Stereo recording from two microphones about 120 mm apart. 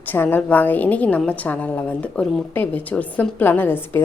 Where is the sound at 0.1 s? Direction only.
15° left (ahead or behind).